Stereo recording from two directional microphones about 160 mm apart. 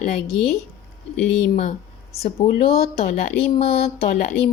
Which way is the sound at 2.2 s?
40° left (ahead or behind).